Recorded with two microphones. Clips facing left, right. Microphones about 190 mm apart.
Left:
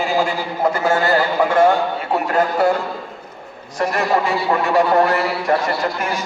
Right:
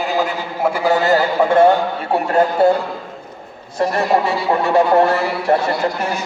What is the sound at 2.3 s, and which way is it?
Speech, 25° right (ahead or behind).